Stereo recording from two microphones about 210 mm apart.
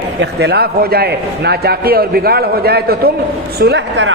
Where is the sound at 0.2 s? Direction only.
50° right (ahead or behind).